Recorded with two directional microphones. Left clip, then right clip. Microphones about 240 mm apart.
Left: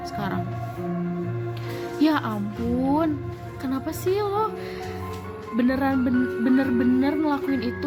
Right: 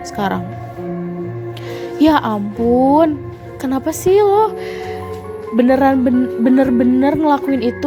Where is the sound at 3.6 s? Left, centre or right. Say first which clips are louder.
Right 10 dB; right.